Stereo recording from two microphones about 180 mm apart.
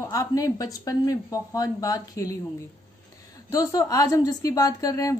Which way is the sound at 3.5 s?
20° left (ahead or behind).